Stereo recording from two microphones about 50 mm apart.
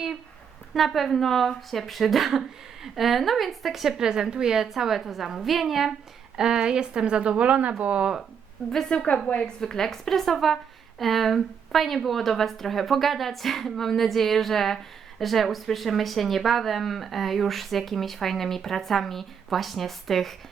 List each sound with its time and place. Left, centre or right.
0.7 s speech: centre
6.3 s speech: centre
8.9 s a woman's voice: left; by 20.3 s centre